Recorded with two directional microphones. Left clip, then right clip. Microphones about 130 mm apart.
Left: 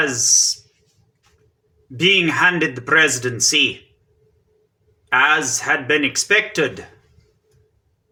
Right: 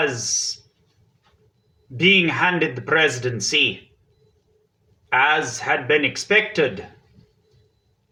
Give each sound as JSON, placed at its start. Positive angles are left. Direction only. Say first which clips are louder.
{"t": 0.0, "sound": "speech", "louder": "left 3 dB", "side_deg": 10}
{"t": 2.0, "sound": "speech", "louder": "left 2 dB", "side_deg": 10}
{"t": 5.0, "sound": "a man's voice", "louder": "left 2 dB", "side_deg": 10}